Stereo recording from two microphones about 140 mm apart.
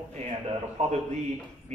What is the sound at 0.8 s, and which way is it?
Speech, 55° right (ahead or behind).